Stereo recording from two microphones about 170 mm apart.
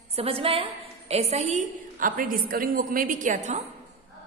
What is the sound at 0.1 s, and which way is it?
A woman's voice, 35° right (ahead or behind).